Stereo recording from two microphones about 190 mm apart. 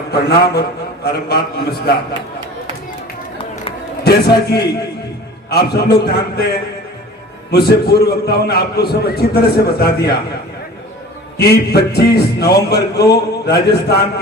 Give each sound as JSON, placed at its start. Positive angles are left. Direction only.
{"t": 0.1, "sound": "a man's voice", "side_deg": 55}
{"t": 4.0, "sound": "a man's voice", "side_deg": 55}
{"t": 11.3, "sound": "a man's voice", "side_deg": 60}